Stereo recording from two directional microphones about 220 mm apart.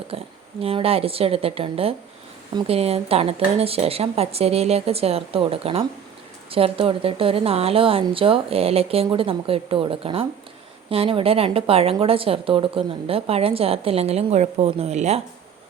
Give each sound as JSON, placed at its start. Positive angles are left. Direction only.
{"t": 0.1, "sound": "speech", "side_deg": -25}